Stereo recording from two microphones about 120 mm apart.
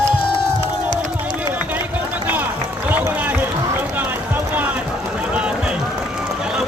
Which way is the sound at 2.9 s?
15° right (ahead or behind).